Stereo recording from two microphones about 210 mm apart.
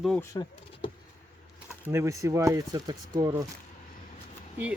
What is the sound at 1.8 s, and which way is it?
Speech, 10° right (ahead or behind).